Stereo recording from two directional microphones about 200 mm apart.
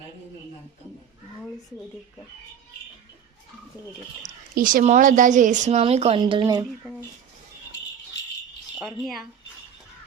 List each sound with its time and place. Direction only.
4.5 s speech: 45° right (ahead or behind); by 6.7 s 20° right (ahead or behind)
8.8 s speech: centre (ahead or behind)